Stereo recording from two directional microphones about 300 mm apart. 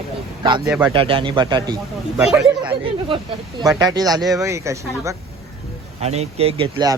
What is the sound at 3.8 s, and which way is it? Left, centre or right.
Speech, centre.